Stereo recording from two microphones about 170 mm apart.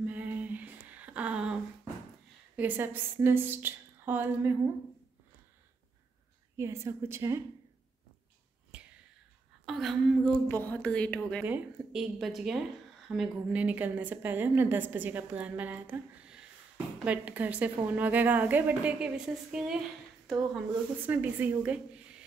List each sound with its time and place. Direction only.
0.0 s a sound: 10° right (ahead or behind)
2.5 s a woman's voice: 10° right (ahead or behind)
6.5 s a woman's voice: 15° right (ahead or behind)
9.7 s speech: centre (ahead or behind)
10.5 s a woman's voice: 10° left (ahead or behind)
11.4 s a woman's voice: 5° right (ahead or behind)
21.0 s a woman's voice: 10° right (ahead or behind)